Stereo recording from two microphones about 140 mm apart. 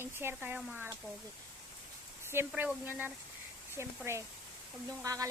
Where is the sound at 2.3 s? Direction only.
15° right (ahead or behind).